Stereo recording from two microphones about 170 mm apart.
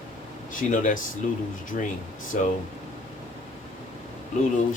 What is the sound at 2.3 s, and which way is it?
Speech, 45° left (ahead or behind).